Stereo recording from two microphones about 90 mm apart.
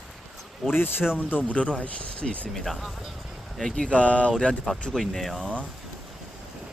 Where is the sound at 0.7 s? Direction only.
25° left (ahead or behind); by 5.5 s centre (ahead or behind).